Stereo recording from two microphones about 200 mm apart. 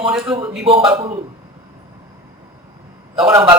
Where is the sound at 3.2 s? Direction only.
20° right (ahead or behind).